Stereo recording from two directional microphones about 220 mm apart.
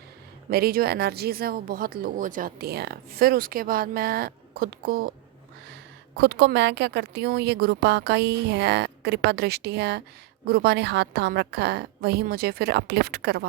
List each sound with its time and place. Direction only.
0.5 s speech: 45° right (ahead or behind)
6.1 s speech: 50° right (ahead or behind)